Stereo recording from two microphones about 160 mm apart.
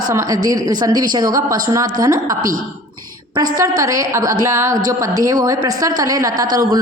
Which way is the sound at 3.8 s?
20° right (ahead or behind).